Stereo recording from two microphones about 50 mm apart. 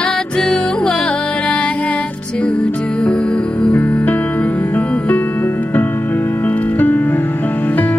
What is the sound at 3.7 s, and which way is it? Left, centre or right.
Music, left.